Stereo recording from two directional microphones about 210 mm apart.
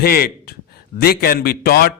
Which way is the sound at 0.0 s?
45° left (ahead or behind).